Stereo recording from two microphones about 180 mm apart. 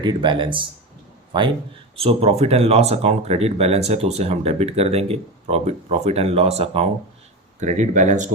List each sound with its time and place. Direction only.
0.0 s speech: 25° right (ahead or behind); by 8.3 s 40° right (ahead or behind)